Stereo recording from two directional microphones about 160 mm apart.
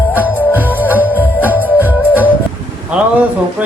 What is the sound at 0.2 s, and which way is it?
Music, 10° left (ahead or behind).